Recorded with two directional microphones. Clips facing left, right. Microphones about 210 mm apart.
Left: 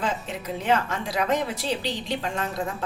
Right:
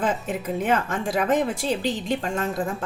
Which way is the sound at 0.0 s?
50° right (ahead or behind).